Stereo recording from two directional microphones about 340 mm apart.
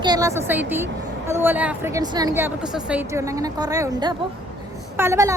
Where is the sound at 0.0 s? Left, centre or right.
Centre.